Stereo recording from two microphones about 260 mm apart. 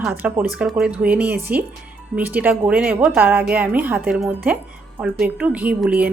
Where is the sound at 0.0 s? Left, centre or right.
Centre.